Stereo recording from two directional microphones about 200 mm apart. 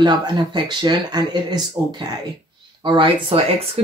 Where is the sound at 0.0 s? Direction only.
20° right (ahead or behind).